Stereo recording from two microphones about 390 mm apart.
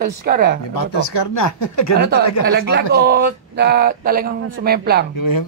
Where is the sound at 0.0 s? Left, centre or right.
Right.